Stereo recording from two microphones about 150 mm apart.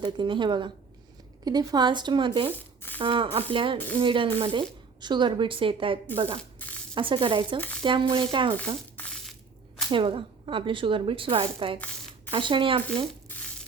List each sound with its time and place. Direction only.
0.0 s speech: 30° right (ahead or behind)
9.0 s crushing: 5° left (ahead or behind)
9.9 s speech: 35° right (ahead or behind)